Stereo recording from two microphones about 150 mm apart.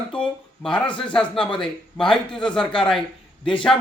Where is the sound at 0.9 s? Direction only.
35° left (ahead or behind).